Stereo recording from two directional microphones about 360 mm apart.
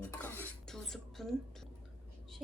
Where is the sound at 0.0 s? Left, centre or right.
Centre.